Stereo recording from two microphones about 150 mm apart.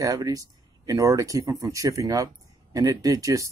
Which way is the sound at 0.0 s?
25° right (ahead or behind).